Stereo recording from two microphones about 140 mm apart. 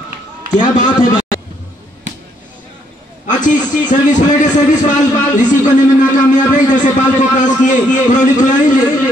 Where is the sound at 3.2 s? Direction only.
65° left (ahead or behind).